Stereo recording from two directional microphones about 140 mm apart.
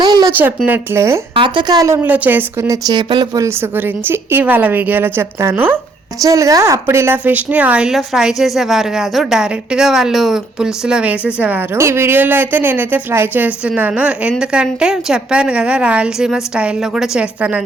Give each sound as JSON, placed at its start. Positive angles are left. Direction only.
{"t": 0.0, "sound": "a sound", "side_deg": -30}
{"t": 0.3, "sound": "a woman's voice", "side_deg": -15}
{"t": 1.4, "sound": "a woman's voice", "side_deg": -30}
{"t": 3.4, "sound": "a woman's voice", "side_deg": -15}